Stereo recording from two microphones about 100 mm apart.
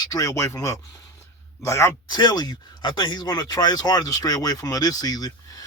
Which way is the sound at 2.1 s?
45° left (ahead or behind).